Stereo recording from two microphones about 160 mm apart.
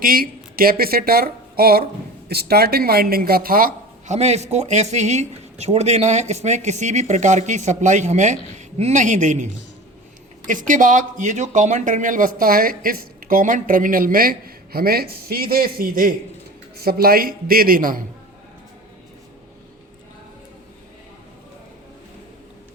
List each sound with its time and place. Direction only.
0.0 s speech: 65° right (ahead or behind)
4.1 s speech: 45° right (ahead or behind); by 18.0 s 60° right (ahead or behind)